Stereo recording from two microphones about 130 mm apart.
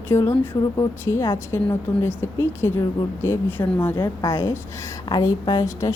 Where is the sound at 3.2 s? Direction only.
20° left (ahead or behind).